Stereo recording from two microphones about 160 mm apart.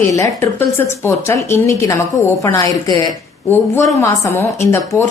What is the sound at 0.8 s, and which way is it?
A woman's voice, 15° left (ahead or behind).